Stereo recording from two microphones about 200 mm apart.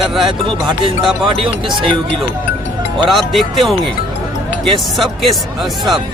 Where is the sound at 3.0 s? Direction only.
Centre (ahead or behind).